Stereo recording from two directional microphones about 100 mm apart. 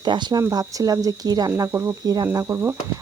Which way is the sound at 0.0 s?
45° right (ahead or behind).